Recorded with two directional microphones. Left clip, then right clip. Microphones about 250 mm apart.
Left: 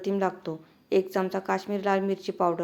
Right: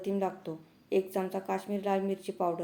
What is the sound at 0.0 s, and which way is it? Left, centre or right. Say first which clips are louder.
A woman's voice: left 5 dB; centre.